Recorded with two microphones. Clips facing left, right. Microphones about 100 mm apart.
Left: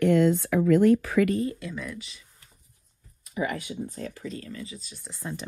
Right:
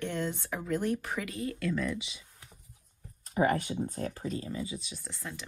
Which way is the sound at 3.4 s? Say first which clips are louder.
Right 2 dB; 40° right (ahead or behind).